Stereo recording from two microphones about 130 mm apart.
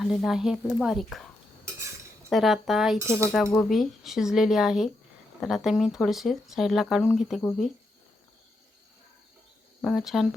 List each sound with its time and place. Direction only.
0.0 s speech: centre (ahead or behind)
2.3 s speech: centre (ahead or behind)
9.8 s speech: centre (ahead or behind)